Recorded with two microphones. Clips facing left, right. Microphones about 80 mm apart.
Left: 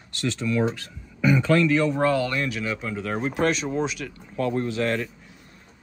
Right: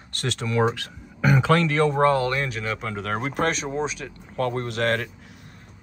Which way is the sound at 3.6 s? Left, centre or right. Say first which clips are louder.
Left 1 dB; right.